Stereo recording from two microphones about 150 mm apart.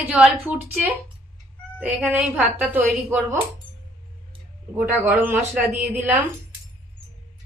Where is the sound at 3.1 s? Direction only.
15° right (ahead or behind).